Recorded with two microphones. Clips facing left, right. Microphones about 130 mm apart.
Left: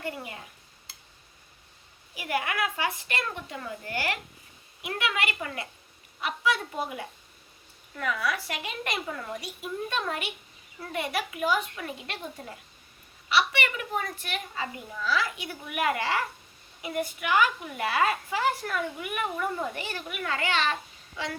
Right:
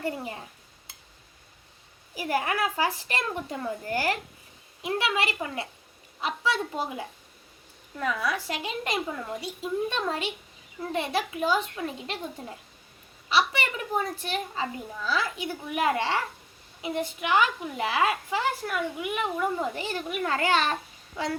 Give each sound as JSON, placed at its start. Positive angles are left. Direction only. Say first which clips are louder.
{"t": 0.0, "sound": "a woman's voice", "louder": "right 4 dB", "side_deg": -30}
{"t": 2.1, "sound": "a woman's voice", "louder": "right 2 dB", "side_deg": -35}